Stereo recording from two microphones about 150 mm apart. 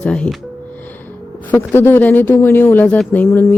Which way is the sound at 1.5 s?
15° left (ahead or behind).